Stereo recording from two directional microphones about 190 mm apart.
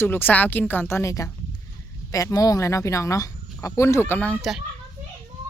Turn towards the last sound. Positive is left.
turn(degrees=0)  # may be behind; listen again after turning